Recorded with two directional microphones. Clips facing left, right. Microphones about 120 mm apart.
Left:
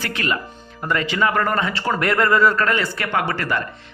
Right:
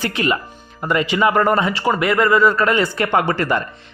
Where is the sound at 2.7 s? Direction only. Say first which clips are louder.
Right 5 dB; 20° right (ahead or behind).